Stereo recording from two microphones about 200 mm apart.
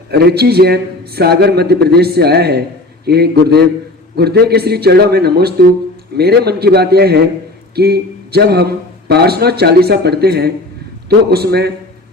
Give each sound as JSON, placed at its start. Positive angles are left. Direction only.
{"t": 0.1, "sound": "speech", "side_deg": -55}